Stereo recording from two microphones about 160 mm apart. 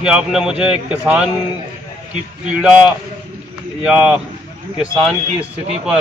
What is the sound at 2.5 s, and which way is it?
Speech, 5° right (ahead or behind).